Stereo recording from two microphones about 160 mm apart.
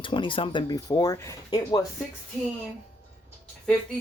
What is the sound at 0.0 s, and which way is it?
Speech, 30° left (ahead or behind).